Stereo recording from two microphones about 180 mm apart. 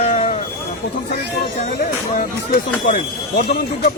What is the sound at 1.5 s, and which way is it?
Speech, 45° left (ahead or behind).